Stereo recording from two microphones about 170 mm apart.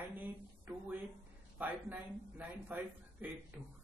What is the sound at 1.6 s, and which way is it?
Speech, 10° right (ahead or behind).